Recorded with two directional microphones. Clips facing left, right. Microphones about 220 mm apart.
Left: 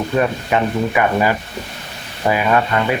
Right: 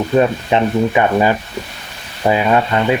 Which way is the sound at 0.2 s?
25° right (ahead or behind).